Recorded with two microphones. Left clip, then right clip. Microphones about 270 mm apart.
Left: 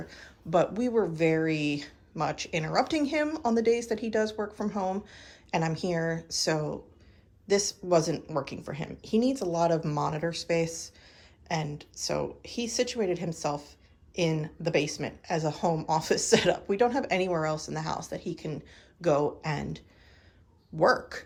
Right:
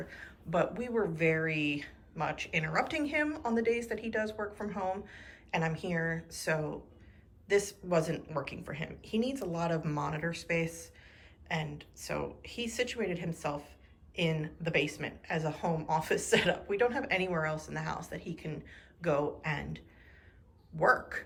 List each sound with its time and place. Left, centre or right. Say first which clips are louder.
0.1 s speech: left 8 dB; centre